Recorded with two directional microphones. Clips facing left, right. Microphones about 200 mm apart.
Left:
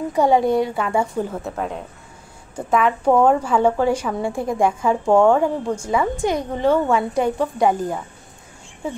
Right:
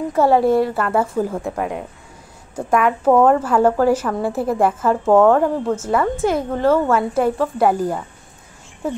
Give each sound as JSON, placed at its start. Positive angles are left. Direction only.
{"t": 0.1, "sound": "a woman's voice", "side_deg": -5}